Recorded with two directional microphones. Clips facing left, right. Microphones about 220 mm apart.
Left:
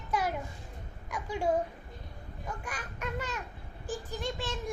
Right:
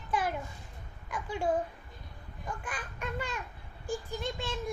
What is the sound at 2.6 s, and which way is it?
Speech, 10° left (ahead or behind).